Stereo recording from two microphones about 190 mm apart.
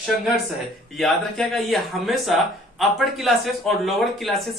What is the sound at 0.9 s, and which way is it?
Speech, centre (ahead or behind).